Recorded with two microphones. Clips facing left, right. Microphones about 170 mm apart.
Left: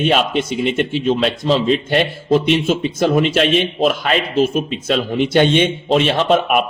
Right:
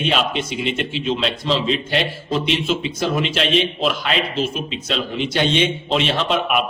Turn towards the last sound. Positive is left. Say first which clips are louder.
# left 5 dB
turn(degrees=45)  # may be behind; listen again after turning